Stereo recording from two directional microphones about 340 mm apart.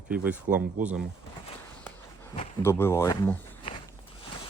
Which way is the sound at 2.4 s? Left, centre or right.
Centre.